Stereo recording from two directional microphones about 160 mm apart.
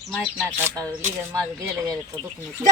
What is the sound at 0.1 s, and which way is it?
Speech, 5° left (ahead or behind).